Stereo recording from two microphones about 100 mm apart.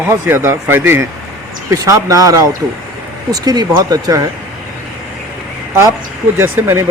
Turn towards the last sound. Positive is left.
turn(degrees=-25)  # may be behind; listen again after turning